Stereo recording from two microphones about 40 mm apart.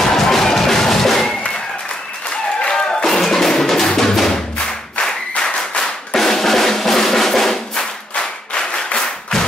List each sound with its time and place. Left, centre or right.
0.0 s music: centre
2.6 s music: centre
5.4 s clapping: centre
6.1 s music: centre
8.1 s clapping: centre